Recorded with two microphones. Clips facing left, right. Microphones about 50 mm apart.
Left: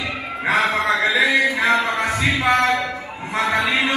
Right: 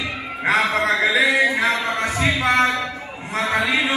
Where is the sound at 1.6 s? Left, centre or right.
Left.